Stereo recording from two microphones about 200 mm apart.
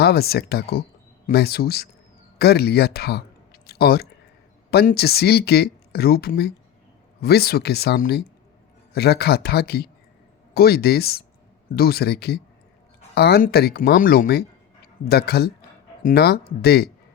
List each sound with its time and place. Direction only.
0.0 s speech: 50° left (ahead or behind)